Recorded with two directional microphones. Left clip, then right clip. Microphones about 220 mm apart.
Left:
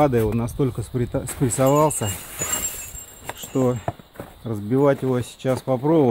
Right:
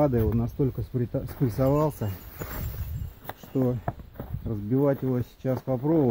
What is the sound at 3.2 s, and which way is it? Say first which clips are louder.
Keys jangling: left 6 dB; 10° left (ahead or behind).